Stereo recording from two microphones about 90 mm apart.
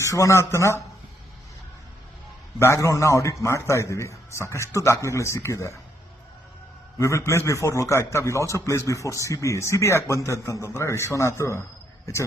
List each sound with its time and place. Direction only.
0.0 s a man's voice: 35° left (ahead or behind)
2.6 s a man's voice: 30° left (ahead or behind)
7.0 s a man's voice: 35° left (ahead or behind)